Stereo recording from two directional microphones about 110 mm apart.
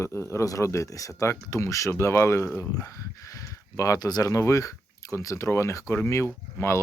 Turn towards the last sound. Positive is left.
turn(degrees=25)  # may be behind; listen again after turning